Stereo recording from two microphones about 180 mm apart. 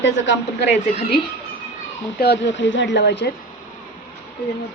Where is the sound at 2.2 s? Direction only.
80° left.